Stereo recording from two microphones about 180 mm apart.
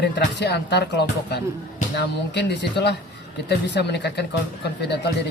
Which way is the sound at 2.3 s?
70° left (ahead or behind).